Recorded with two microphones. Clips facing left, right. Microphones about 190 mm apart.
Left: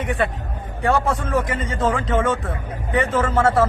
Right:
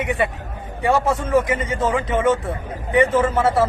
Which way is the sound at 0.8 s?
15° right (ahead or behind).